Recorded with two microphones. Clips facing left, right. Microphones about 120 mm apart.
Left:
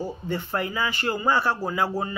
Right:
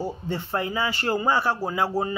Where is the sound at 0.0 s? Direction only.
25° right (ahead or behind).